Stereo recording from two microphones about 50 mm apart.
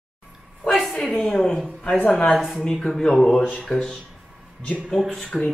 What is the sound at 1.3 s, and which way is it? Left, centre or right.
A woman's voice, centre.